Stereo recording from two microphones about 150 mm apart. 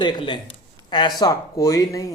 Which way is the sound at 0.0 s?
30° left (ahead or behind).